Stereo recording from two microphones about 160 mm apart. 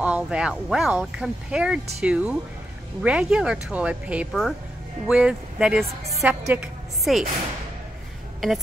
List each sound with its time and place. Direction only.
0.0 s speech: 5° right (ahead or behind)
4.3 s a woman's voice: 5° left (ahead or behind)
8.4 s speech: centre (ahead or behind)